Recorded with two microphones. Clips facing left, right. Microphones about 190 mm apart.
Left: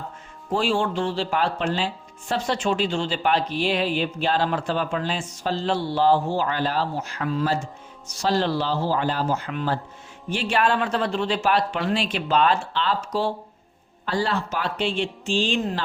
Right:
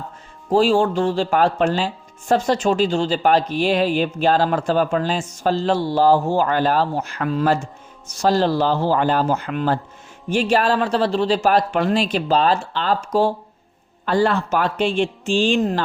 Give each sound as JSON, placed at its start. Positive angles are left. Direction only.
{"t": 0.5, "sound": "speech", "side_deg": -40}
{"t": 8.2, "sound": "speech", "side_deg": -45}
{"t": 10.2, "sound": "speech", "side_deg": -45}